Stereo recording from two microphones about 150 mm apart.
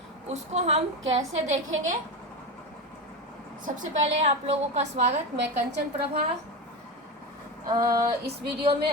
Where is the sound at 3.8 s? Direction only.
45° right (ahead or behind).